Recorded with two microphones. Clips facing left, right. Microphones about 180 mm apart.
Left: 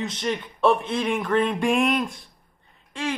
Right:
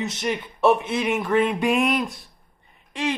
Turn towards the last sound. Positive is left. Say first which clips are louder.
# right 3 dB
turn(degrees=-15)  # may be behind; listen again after turning